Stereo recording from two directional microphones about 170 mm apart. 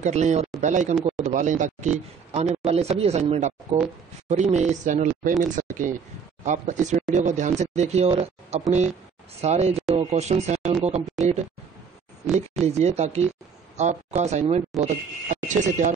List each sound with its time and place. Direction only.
0.0 s speech: 45° right (ahead or behind)
12.6 s speech: 40° right (ahead or behind)